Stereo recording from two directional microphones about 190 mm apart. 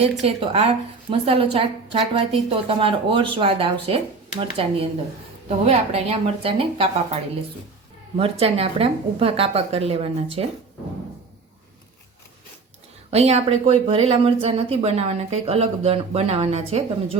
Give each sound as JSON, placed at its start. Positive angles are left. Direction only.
{"t": 0.0, "sound": "a woman's voice", "side_deg": -30}
{"t": 8.2, "sound": "speech", "side_deg": -30}
{"t": 13.1, "sound": "speech", "side_deg": -35}